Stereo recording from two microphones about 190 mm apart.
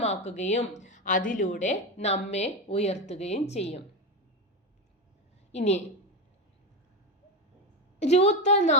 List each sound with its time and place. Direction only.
0.0 s speech: 35° left (ahead or behind)
5.5 s a woman's voice: 35° left (ahead or behind)
7.9 s speech: 35° left (ahead or behind)